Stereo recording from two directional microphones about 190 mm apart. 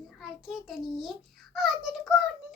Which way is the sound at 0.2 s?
Centre (ahead or behind).